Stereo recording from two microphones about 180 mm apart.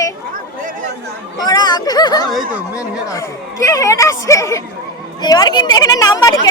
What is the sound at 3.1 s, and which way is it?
Speech, 20° left (ahead or behind).